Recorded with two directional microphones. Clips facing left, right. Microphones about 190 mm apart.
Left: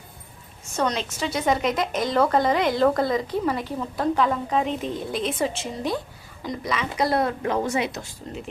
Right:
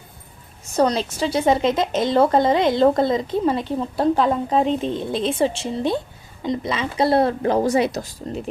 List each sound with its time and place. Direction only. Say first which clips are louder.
0.6 s a woman's voice: right 6 dB; 35° right (ahead or behind)